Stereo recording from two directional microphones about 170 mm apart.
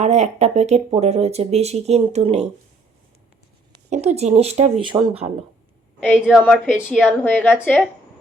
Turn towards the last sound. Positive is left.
turn(degrees=10)  # may be behind; listen again after turning